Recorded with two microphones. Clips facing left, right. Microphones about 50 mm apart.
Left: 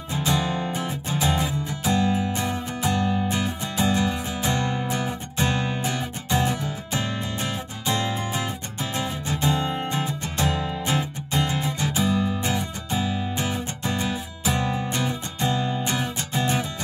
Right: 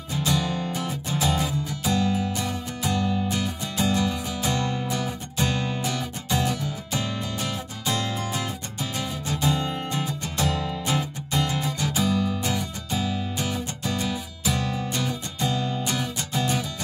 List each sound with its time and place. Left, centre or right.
0.1 s music: left